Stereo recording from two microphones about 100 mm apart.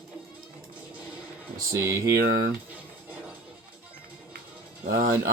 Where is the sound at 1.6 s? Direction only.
30° right (ahead or behind).